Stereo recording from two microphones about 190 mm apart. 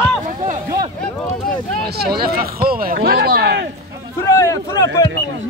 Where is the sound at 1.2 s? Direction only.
10° left (ahead or behind).